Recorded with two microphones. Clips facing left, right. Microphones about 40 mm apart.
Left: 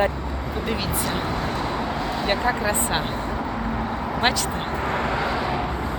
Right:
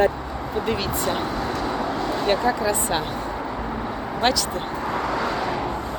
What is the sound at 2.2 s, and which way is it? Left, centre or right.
Speech, centre.